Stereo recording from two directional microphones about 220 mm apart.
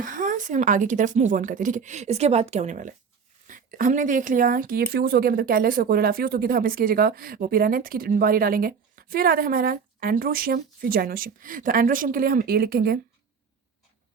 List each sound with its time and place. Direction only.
0.0 s speech: 35° right (ahead or behind)